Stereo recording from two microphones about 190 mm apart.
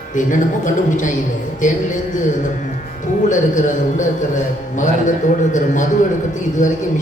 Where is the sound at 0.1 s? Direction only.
40° left (ahead or behind).